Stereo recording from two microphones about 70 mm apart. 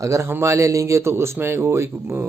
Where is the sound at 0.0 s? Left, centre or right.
Right.